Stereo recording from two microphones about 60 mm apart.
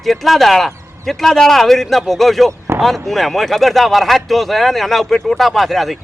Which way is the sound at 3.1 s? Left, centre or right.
Centre.